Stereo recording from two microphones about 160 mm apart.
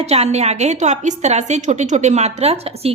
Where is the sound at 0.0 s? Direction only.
40° right (ahead or behind).